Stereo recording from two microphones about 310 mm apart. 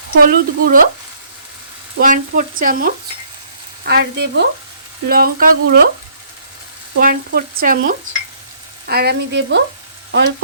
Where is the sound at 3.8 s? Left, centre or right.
Right.